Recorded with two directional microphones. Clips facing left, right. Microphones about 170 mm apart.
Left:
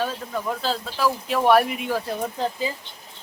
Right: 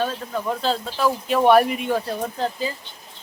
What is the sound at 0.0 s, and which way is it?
Speech, centre (ahead or behind).